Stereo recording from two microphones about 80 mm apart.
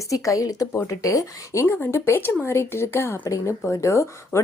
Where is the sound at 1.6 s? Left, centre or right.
Left.